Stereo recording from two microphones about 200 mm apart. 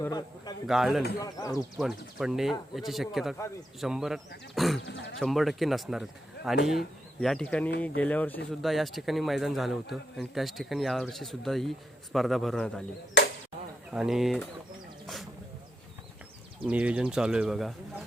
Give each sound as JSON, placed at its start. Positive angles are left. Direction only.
{"t": 0.0, "sound": "a man's voice", "side_deg": 20}
{"t": 0.7, "sound": "a man's voice", "side_deg": 0}
{"t": 1.2, "sound": "speech", "side_deg": 20}
{"t": 1.5, "sound": "a man's voice", "side_deg": 0}
{"t": 4.9, "sound": "a sound", "side_deg": 60}
{"t": 5.2, "sound": "a man's voice", "side_deg": 0}
{"t": 13.2, "sound": "a sound", "side_deg": 60}
{"t": 13.9, "sound": "a man's voice", "side_deg": 0}
{"t": 16.6, "sound": "a man's voice", "side_deg": -5}